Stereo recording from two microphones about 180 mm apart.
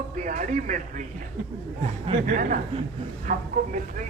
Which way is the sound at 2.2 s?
45° right (ahead or behind).